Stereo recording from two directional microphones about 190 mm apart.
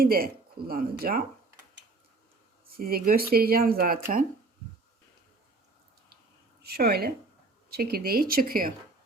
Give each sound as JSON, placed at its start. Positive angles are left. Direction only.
{"t": 0.0, "sound": "speech", "side_deg": -50}
{"t": 2.7, "sound": "speech", "side_deg": -50}
{"t": 6.6, "sound": "a woman's voice", "side_deg": -55}